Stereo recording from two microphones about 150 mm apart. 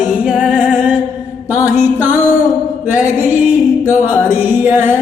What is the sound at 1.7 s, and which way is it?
Music, 15° right (ahead or behind).